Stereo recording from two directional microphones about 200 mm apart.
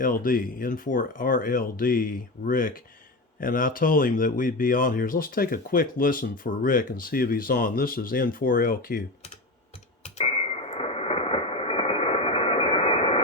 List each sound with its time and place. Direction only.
0.0 s speech: 45° left (ahead or behind)
10.0 s radio: 30° left (ahead or behind)